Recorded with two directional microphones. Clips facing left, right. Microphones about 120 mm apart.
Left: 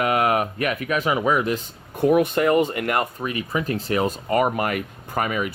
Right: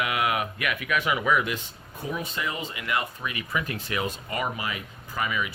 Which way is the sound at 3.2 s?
35° left (ahead or behind).